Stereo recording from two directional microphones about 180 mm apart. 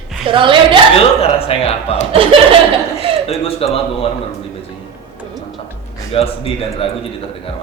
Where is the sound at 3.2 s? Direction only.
35° left (ahead or behind).